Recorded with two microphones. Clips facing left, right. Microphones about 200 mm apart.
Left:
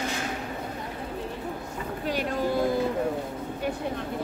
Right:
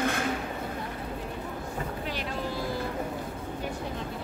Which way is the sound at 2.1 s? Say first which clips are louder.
Left 6 dB; 50° left (ahead or behind).